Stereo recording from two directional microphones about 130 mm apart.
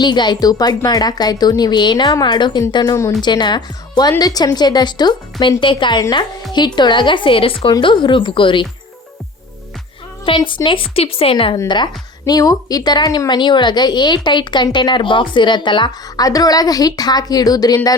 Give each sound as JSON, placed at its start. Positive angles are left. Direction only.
{"t": 0.0, "sound": "a woman's voice", "side_deg": 35}
{"t": 3.2, "sound": "a woman's voice", "side_deg": 35}
{"t": 10.2, "sound": "a woman's voice", "side_deg": 40}
{"t": 11.7, "sound": "a woman's voice", "side_deg": 35}